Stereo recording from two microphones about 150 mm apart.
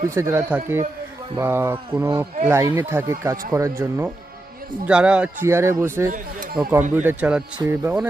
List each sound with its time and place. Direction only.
0.1 s a man's voice: 15° right (ahead or behind)
4.9 s a man's voice: 5° right (ahead or behind)
6.1 s a man's voice: 65° right (ahead or behind)
6.6 s a man's voice: 10° right (ahead or behind)
7.6 s speech: 20° right (ahead or behind)